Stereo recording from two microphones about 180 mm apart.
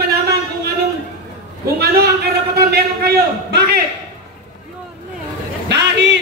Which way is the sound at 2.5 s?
60° right (ahead or behind).